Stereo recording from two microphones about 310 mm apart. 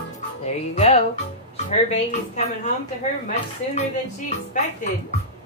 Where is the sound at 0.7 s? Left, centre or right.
Left.